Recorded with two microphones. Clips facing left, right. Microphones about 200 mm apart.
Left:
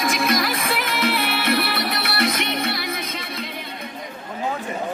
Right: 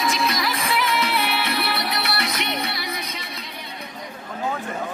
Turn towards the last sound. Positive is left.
turn(degrees=55)  # may be behind; listen again after turning